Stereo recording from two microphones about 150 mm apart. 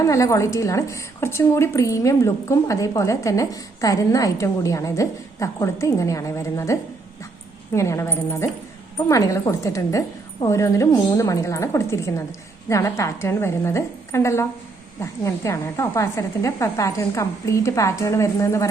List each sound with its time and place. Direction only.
0.0 s a woman's voice: 20° left (ahead or behind)